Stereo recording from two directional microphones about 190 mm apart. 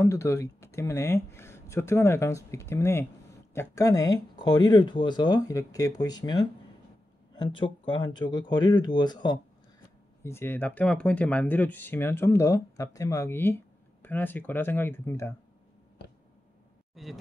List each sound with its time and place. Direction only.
0.0 s speech: 15° left (ahead or behind)
16.9 s speech: centre (ahead or behind)